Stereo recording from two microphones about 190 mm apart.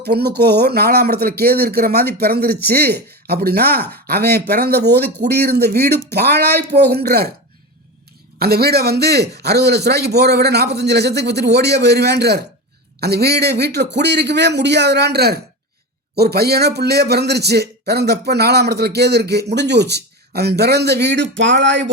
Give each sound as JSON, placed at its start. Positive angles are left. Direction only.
{"t": 0.0, "sound": "speech", "side_deg": -60}
{"t": 8.4, "sound": "speech", "side_deg": -55}